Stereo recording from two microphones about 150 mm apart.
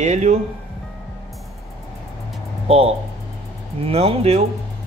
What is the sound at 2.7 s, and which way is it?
Speech, 40° right (ahead or behind).